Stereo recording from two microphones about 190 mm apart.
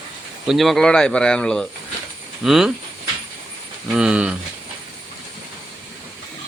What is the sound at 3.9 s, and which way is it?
Speech, 5° right (ahead or behind).